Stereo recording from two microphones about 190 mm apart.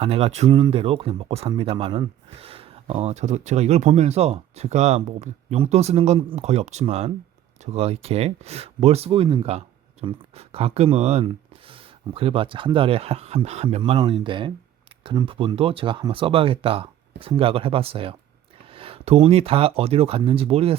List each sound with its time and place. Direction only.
0.0 s speech: 30° right (ahead or behind)